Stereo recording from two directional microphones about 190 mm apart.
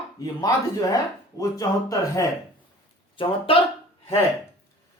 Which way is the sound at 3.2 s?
30° left (ahead or behind).